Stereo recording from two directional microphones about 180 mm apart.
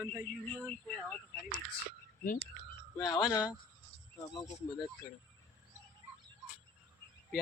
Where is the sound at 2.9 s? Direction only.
20° left (ahead or behind).